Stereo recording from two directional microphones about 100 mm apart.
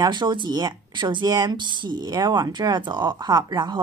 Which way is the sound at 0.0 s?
50° right (ahead or behind).